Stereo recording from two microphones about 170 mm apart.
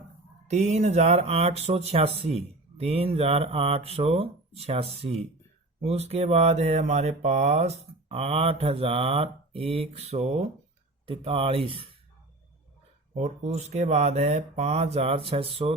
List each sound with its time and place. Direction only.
0.4 s speech: 40° right (ahead or behind)
13.1 s speech: 45° right (ahead or behind)